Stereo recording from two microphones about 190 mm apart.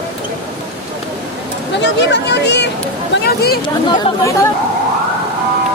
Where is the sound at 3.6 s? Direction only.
25° left (ahead or behind).